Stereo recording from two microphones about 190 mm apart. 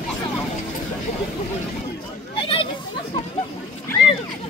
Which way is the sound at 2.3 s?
30° left (ahead or behind).